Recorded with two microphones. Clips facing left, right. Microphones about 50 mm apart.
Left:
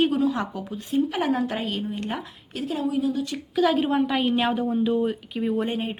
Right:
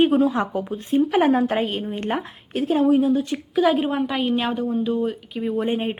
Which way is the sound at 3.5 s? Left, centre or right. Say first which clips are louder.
Right 2 dB; centre.